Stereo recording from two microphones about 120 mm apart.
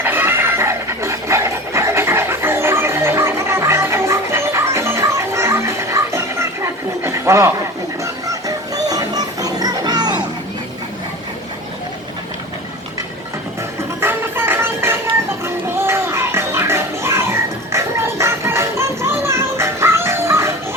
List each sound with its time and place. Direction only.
0.0 s dog: 15° right (ahead or behind)
8.0 s music: 30° right (ahead or behind)
14.0 s music: 20° right (ahead or behind)